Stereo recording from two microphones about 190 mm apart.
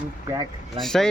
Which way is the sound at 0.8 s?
Centre (ahead or behind).